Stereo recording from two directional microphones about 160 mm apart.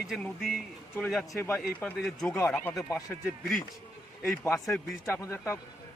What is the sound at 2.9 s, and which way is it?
Speech, 20° left (ahead or behind).